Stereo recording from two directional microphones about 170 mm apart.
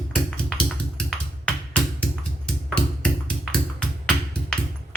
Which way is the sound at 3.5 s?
5° left (ahead or behind).